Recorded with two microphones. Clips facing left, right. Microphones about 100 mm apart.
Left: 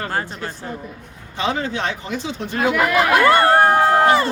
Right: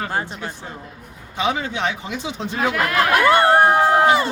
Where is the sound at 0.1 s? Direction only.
15° right (ahead or behind).